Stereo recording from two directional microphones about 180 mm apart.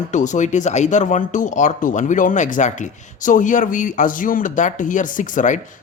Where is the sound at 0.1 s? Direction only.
45° left (ahead or behind).